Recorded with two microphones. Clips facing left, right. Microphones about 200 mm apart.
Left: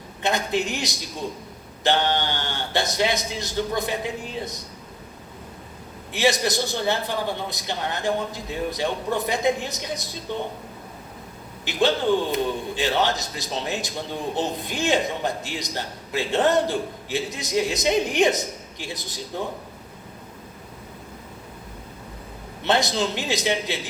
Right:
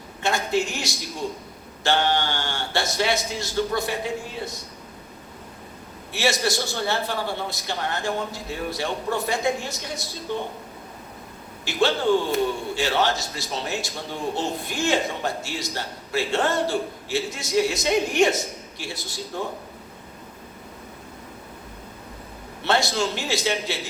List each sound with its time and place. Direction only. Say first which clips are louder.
0.2 s a man's voice: even; 20° left (ahead or behind)
6.1 s a man's voice: left 2 dB; 20° left (ahead or behind)
11.6 s a man's voice: even; 20° left (ahead or behind)
22.6 s a man's voice: left 1 dB; 20° left (ahead or behind)